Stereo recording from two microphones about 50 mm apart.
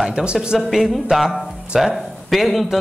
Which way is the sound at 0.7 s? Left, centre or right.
Centre.